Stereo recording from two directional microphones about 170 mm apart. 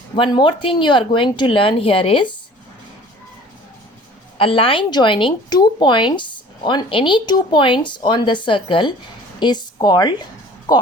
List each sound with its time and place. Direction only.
0.2 s speech: 30° left (ahead or behind)
4.4 s speech: 30° left (ahead or behind)